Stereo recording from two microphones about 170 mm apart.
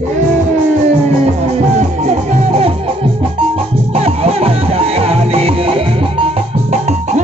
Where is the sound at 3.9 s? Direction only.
35° right (ahead or behind).